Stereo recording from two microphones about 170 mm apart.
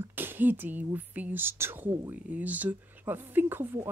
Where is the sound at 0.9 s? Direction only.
10° right (ahead or behind).